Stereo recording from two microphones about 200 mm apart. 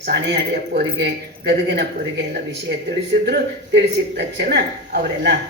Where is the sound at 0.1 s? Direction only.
55° right (ahead or behind).